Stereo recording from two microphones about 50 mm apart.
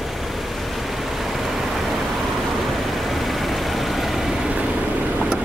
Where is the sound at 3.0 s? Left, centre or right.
Centre.